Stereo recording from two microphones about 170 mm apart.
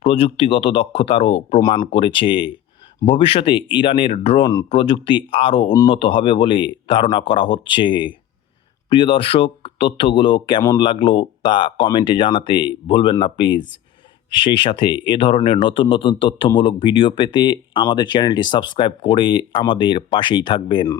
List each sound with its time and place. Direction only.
0.0 s speech: 35° left (ahead or behind)
1.6 s speech: 25° left (ahead or behind)